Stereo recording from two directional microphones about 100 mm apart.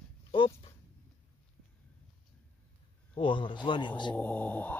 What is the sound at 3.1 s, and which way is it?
Speech, 55° left (ahead or behind).